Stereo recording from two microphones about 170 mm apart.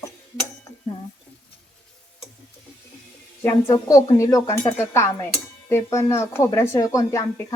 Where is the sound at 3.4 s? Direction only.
15° left (ahead or behind).